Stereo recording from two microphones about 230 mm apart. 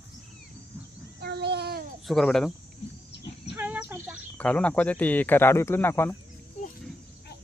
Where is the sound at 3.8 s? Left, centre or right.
Centre.